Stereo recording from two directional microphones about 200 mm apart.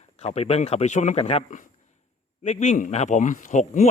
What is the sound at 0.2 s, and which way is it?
A man's voice, 30° left (ahead or behind).